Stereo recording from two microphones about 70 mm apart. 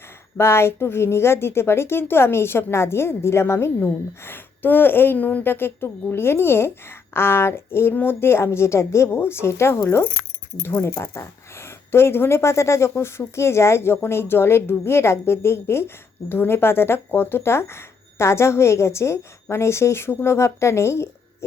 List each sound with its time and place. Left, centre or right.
0.3 s a woman's voice: left